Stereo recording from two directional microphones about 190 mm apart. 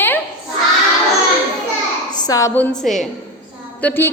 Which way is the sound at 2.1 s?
20° left (ahead or behind).